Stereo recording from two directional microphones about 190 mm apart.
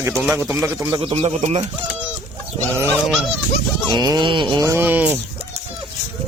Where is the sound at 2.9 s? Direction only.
Centre (ahead or behind).